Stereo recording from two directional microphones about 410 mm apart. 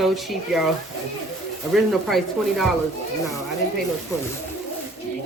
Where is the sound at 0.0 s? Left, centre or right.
Centre.